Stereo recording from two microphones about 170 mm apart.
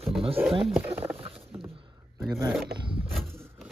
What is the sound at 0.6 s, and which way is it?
Speech, 10° right (ahead or behind).